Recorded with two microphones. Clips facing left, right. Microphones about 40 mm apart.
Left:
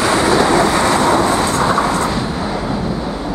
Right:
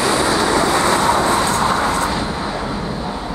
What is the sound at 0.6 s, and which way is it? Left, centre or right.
Vehicle, centre.